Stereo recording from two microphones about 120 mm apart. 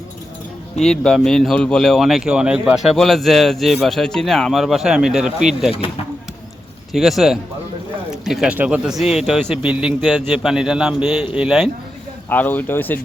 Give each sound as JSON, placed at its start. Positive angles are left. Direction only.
{"t": 0.8, "sound": "speech", "side_deg": 5}
{"t": 6.9, "sound": "speech", "side_deg": 0}
{"t": 12.3, "sound": "speech", "side_deg": 15}